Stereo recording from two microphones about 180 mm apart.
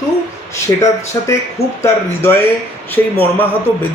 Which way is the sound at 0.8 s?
15° left (ahead or behind).